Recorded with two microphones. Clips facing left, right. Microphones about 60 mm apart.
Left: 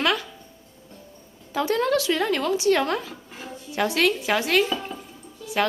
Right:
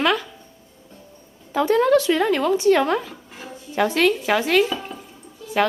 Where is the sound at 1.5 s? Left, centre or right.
Centre.